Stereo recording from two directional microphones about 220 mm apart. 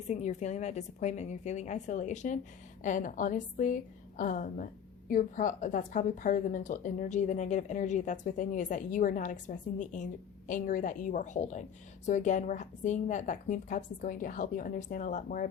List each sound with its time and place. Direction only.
0.1 s a woman's voice: 30° left (ahead or behind)